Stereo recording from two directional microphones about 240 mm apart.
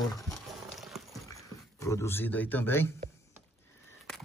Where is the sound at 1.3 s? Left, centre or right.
Centre.